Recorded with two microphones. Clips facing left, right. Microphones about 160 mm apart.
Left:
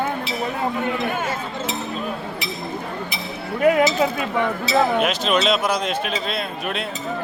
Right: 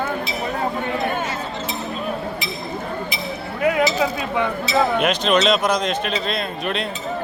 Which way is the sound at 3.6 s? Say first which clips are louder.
Left 2 dB; 50° left (ahead or behind).